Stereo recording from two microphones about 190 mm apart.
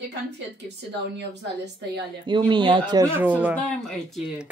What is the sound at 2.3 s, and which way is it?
Speech, 25° right (ahead or behind).